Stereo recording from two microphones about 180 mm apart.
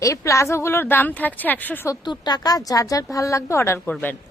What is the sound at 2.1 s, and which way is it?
Speech, 25° left (ahead or behind).